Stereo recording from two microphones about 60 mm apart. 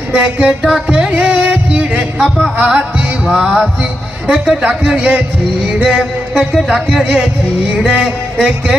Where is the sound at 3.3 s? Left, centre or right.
Centre.